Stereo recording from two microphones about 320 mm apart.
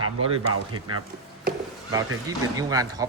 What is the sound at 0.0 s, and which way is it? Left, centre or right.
Speech, right.